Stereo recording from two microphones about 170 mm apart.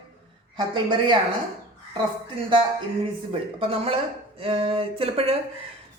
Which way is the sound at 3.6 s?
35° right (ahead or behind).